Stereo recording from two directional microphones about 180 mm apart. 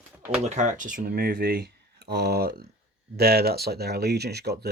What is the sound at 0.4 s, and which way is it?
Speech, 40° right (ahead or behind).